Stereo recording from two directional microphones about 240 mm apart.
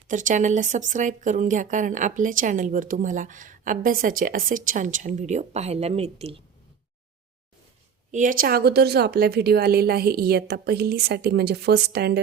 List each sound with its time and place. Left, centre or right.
0.1 s speech: right
8.1 s speech: right